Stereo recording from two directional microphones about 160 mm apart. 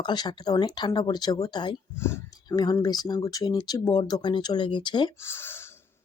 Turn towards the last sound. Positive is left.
turn(degrees=15)  # may be behind; listen again after turning